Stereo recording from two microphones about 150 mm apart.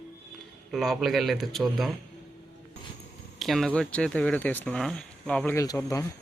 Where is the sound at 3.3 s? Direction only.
Centre (ahead or behind).